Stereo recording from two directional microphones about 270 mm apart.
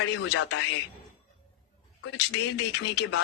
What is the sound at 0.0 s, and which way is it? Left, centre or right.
Speech, left.